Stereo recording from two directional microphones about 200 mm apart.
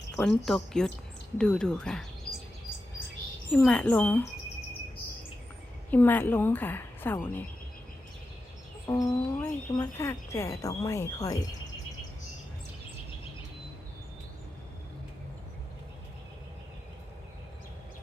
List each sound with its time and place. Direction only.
0.2 s speech: 5° left (ahead or behind)
3.5 s speech: 5° left (ahead or behind)
5.9 s speech: 10° left (ahead or behind)
8.9 s speech: 15° left (ahead or behind)